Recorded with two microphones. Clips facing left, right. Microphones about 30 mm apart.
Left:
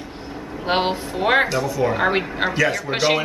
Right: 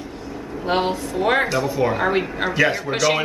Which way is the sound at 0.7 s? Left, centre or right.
Left.